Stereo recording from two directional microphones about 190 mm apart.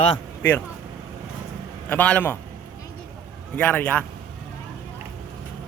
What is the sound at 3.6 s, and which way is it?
Speech, 5° left (ahead or behind).